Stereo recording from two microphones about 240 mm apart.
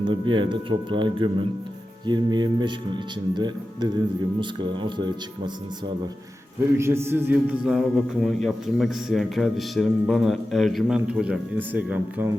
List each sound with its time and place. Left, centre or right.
0.0 s speech: centre
6.7 s a man's voice: centre